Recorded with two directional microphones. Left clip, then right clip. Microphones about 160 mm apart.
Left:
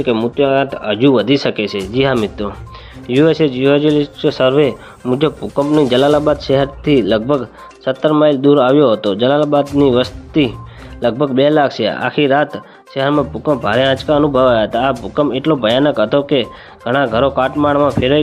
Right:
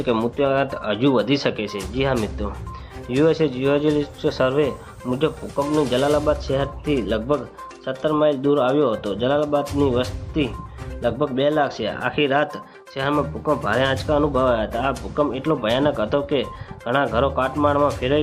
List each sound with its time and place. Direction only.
0.0 s speech: 10° left (ahead or behind); by 18.2 s 25° left (ahead or behind)